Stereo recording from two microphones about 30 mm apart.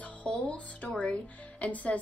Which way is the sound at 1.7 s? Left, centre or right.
Left.